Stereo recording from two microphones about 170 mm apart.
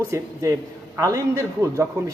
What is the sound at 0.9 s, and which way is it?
Speech, 20° right (ahead or behind).